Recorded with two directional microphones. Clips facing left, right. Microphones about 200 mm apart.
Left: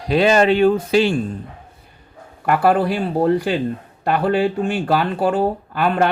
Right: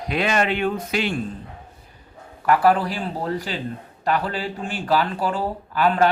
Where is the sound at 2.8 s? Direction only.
60° left (ahead or behind).